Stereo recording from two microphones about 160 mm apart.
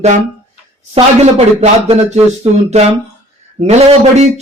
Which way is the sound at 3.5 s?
45° right (ahead or behind).